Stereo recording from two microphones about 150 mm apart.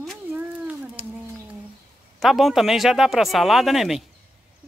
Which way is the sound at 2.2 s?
Centre (ahead or behind).